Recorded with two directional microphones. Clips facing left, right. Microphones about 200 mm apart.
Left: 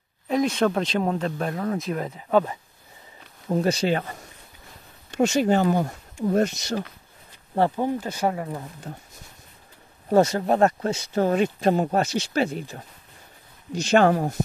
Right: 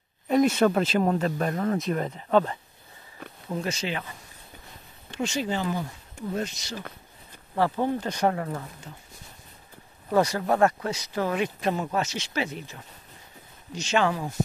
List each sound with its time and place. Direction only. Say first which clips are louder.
0.3 s speech: right 1 dB; 5° right (ahead or behind)
3.4 s speech: left 8 dB; 35° left (ahead or behind)
7.7 s speech: left 1 dB; 10° left (ahead or behind)
8.9 s speech: left 7 dB; 50° left (ahead or behind)
10.0 s speech: left 4 dB; 25° left (ahead or behind)
13.7 s speech: left 7 dB; 50° left (ahead or behind)